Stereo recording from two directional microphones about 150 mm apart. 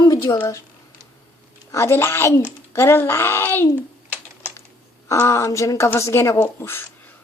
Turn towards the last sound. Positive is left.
turn(degrees=15)  # may be behind; listen again after turning